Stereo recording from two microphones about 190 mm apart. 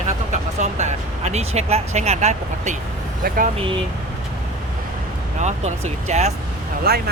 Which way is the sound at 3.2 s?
45° right (ahead or behind).